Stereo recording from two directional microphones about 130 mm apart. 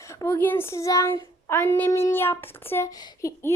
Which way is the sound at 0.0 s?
25° left (ahead or behind).